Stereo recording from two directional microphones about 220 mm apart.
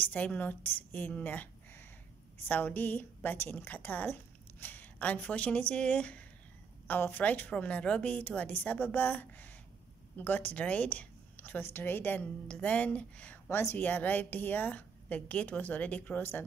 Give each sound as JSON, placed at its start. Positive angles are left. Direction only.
{"t": 0.1, "sound": "a woman's voice", "side_deg": 5}